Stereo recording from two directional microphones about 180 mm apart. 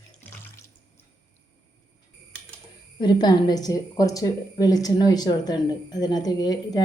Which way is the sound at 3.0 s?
25° left (ahead or behind).